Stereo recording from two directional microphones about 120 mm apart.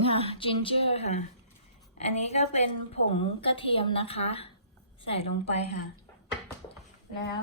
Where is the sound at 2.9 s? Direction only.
50° left (ahead or behind).